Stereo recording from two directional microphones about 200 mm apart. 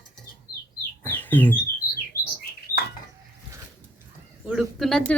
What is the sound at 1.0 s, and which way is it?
Bird, 10° left (ahead or behind).